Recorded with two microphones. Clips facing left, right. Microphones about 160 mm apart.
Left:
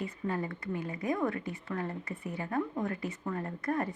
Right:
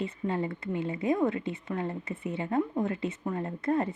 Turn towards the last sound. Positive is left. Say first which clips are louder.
# right 4 dB
turn(degrees=-25)  # may be behind; listen again after turning